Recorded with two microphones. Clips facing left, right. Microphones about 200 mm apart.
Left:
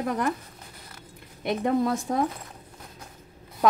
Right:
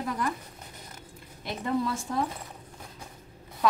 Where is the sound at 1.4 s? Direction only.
55° left (ahead or behind).